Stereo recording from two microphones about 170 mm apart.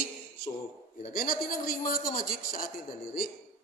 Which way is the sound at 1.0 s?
60° left (ahead or behind).